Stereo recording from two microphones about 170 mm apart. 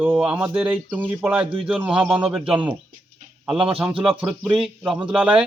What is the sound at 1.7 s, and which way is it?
Speech, 5° right (ahead or behind).